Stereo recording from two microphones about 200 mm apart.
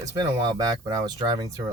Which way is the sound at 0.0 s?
20° right (ahead or behind).